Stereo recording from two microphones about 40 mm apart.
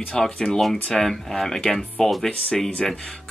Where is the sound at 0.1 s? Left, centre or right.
Centre.